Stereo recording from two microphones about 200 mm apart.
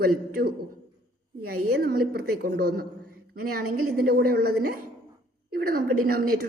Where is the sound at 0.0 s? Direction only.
50° right (ahead or behind).